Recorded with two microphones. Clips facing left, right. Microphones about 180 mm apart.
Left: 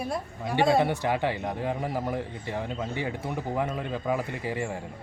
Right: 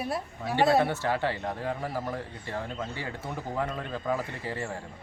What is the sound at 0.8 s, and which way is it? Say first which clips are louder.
Speech: left 2 dB; 15° left (ahead or behind).